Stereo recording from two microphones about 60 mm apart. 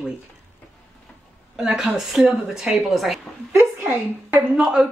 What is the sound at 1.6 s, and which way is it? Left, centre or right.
Speech, centre.